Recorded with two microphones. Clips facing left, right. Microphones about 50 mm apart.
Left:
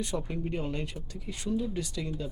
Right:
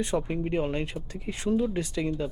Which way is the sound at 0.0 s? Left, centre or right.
Right.